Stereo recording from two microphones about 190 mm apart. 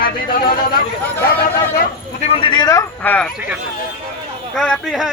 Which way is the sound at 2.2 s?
30° left (ahead or behind).